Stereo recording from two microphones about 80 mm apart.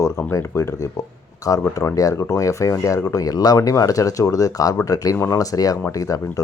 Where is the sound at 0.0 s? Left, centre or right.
Left.